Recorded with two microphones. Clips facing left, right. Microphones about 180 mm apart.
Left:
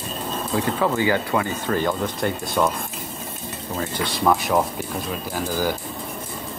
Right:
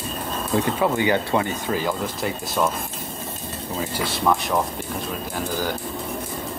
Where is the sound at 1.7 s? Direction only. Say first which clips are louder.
Left 2 dB; 5° right (ahead or behind).